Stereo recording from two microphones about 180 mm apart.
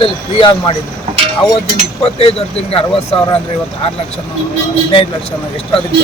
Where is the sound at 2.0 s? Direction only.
35° left (ahead or behind).